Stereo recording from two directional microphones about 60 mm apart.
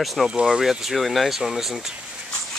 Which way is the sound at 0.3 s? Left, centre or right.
Centre.